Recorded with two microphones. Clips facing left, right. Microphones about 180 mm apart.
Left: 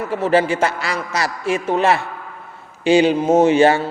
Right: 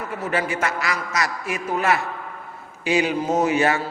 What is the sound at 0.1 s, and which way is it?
A man's voice, 30° left (ahead or behind).